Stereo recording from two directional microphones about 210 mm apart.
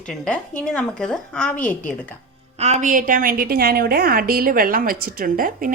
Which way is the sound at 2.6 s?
35° right (ahead or behind).